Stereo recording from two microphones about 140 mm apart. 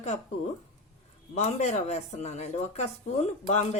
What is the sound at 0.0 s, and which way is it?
Speech, 55° left (ahead or behind).